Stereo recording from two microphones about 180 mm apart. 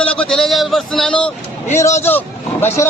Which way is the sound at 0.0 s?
5° left (ahead or behind).